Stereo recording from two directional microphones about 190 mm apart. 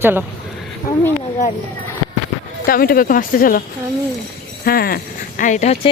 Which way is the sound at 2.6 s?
50° left (ahead or behind).